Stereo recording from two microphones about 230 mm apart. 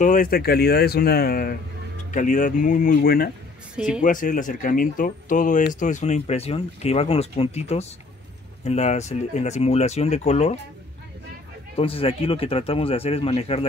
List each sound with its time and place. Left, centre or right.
0.0 s speech: left
3.7 s speech: centre
4.0 s speech: left
11.7 s speech: left